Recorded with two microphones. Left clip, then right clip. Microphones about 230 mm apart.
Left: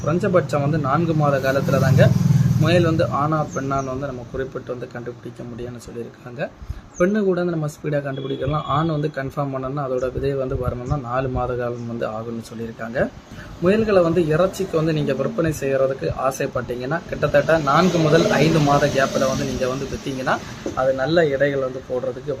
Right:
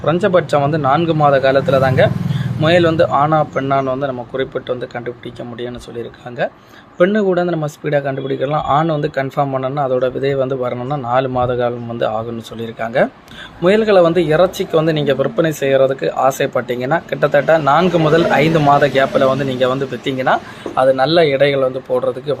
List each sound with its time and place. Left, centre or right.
0.0 s a man's voice: centre
7.0 s a man's voice: centre